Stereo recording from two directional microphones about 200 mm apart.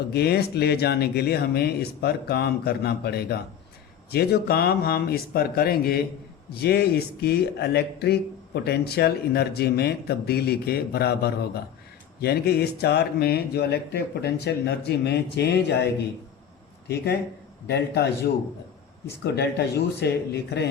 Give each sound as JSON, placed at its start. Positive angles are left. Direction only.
{"t": 0.1, "sound": "a man's voice", "side_deg": 55}
{"t": 17.7, "sound": "a man's voice", "side_deg": 55}
{"t": 19.2, "sound": "a man's voice", "side_deg": 55}